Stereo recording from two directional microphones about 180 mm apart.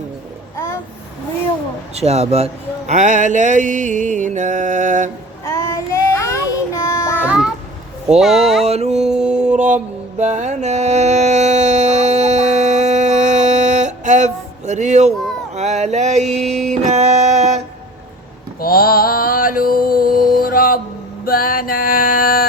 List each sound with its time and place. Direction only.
2.0 s a man's voice: 35° right (ahead or behind)
5.5 s child singing: 15° left (ahead or behind)
7.2 s cat: 5° right (ahead or behind)
8.2 s speech: centre (ahead or behind)
8.6 s mantra: 35° right (ahead or behind)
9.0 s music: 5° right (ahead or behind)
9.6 s mantra: 40° right (ahead or behind)
16.8 s music: 40° right (ahead or behind)
17.3 s a sound: 40° right (ahead or behind)
18.6 s mantra: 55° left (ahead or behind)
21.2 s a sound: 55° left (ahead or behind)